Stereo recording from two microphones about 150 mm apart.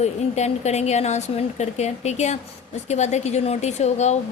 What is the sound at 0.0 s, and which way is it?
A woman's voice, 50° left (ahead or behind).